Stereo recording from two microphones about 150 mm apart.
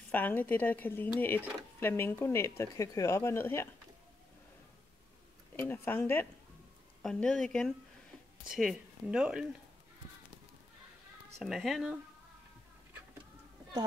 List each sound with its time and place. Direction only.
0.1 s speech: 10° left (ahead or behind)
5.6 s speech: 15° left (ahead or behind); by 9.5 s 5° right (ahead or behind)
11.3 s speech: centre (ahead or behind)